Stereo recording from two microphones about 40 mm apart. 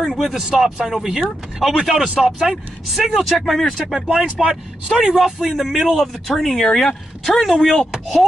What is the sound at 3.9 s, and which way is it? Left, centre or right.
Speech, centre.